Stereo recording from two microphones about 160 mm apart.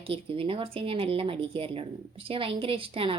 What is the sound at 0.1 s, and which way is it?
A woman's voice, 35° right (ahead or behind).